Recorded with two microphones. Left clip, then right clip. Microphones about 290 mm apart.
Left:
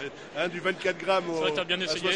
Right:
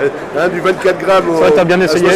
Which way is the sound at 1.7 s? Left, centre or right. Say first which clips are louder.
Right 17 dB; centre.